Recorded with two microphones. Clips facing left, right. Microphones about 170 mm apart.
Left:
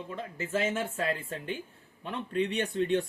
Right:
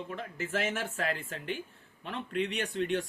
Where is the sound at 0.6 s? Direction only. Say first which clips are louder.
Left 3 dB; 25° left (ahead or behind).